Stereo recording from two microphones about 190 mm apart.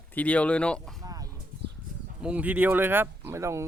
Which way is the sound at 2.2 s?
5° right (ahead or behind).